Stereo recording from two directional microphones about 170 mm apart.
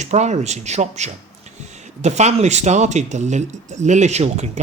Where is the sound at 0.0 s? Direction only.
40° right (ahead or behind).